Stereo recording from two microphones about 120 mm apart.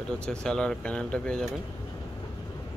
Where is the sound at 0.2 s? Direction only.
5° left (ahead or behind).